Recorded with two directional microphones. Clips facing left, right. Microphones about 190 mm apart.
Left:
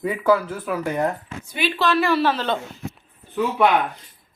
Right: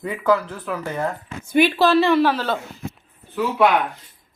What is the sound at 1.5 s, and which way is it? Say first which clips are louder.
Speech: right 6 dB; 45° right (ahead or behind).